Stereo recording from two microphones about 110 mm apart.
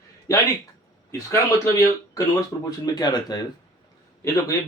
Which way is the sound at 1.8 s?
25° left (ahead or behind).